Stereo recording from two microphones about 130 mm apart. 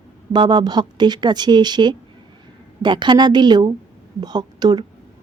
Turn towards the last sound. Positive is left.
turn(degrees=-35)  # may be behind; listen again after turning